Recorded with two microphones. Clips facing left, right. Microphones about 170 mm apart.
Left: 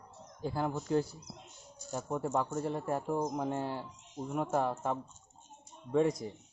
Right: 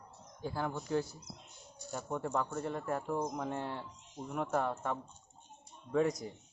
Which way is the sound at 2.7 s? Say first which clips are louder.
Left 1 dB; 30° left (ahead or behind).